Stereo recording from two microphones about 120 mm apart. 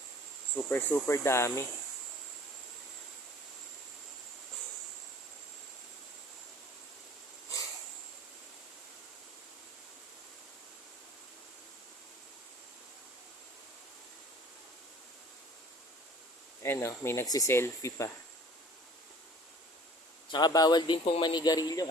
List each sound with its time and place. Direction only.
0.5 s speech: 15° left (ahead or behind)
16.6 s speech: 20° left (ahead or behind)
20.3 s speech: 35° left (ahead or behind)